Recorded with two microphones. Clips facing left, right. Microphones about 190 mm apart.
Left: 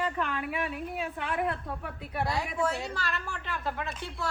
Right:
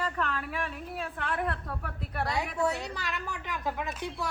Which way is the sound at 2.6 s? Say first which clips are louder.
Even; 20° right (ahead or behind).